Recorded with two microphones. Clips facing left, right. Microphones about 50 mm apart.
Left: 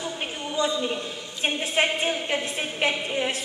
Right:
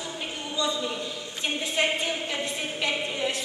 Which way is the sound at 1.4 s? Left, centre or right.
Left.